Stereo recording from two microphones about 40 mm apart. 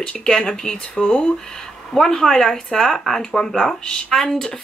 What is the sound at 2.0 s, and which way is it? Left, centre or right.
Speech, centre.